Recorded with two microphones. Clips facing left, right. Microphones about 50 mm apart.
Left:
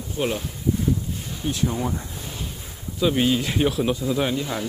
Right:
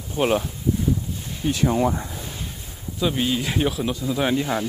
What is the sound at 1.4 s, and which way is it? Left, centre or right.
Speech, right.